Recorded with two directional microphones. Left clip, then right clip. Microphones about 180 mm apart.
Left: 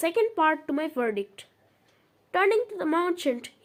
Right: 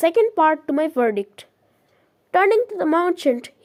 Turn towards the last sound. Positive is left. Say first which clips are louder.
# right 8 dB
turn(degrees=-35)  # may be behind; listen again after turning